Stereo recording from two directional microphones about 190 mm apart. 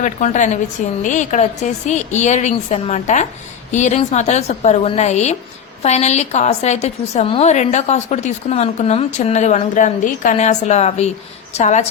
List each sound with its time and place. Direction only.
0.0 s a woman's voice: 40° left (ahead or behind)